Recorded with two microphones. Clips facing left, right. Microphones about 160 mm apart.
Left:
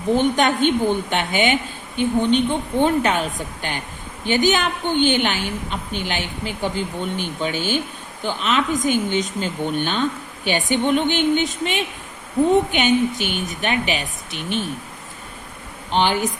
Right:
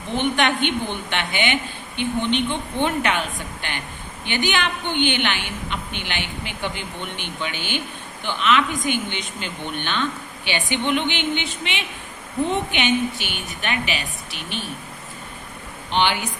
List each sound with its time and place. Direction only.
0.1 s a woman's voice: 40° left (ahead or behind)
15.9 s speech: 40° left (ahead or behind)